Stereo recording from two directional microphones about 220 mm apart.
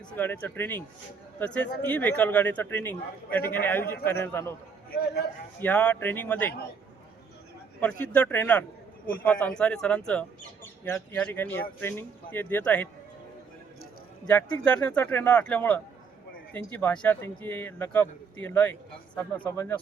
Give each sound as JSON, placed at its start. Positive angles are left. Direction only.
{"t": 0.2, "sound": "a man's voice", "side_deg": 10}
{"t": 5.5, "sound": "a man's voice", "side_deg": 10}
{"t": 7.8, "sound": "a man's voice", "side_deg": 5}
{"t": 14.3, "sound": "a man's voice", "side_deg": 5}